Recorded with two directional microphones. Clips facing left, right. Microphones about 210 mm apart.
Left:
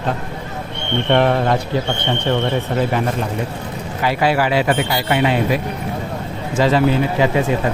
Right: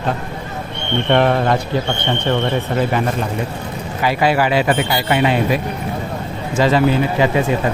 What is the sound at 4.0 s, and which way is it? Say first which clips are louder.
A man's voice: right 1 dB; 15° right (ahead or behind).